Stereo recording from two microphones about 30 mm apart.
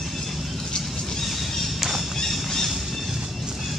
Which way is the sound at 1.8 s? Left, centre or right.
Centre.